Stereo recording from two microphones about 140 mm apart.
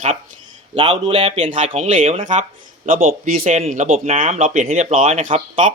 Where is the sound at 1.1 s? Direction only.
50° right (ahead or behind).